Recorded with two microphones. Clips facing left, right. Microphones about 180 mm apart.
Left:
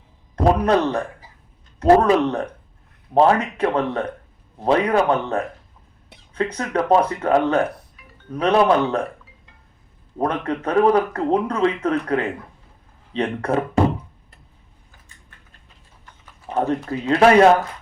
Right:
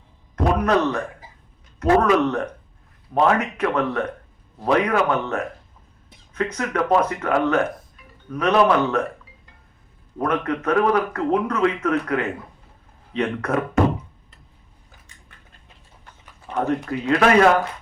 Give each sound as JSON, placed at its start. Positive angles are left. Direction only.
{"t": 0.3, "sound": "a man's voice", "side_deg": 30}
{"t": 10.2, "sound": "speech", "side_deg": 30}
{"t": 16.5, "sound": "speech", "side_deg": 30}